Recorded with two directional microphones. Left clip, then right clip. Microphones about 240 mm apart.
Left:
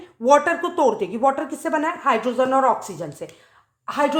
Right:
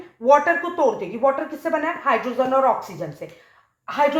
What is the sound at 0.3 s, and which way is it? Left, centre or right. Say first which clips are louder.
A woman's voice: even; left.